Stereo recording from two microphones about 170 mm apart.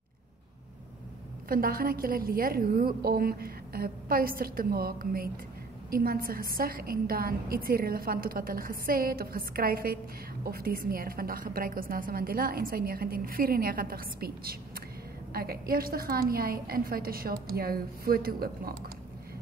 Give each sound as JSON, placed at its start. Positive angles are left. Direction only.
{"t": 1.5, "sound": "a woman's voice", "side_deg": -60}